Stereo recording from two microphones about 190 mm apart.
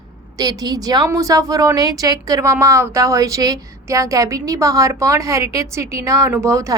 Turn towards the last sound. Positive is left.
turn(degrees=-15)  # may be behind; listen again after turning